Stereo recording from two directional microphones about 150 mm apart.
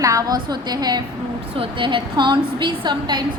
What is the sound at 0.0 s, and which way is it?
A woman's voice, 20° right (ahead or behind).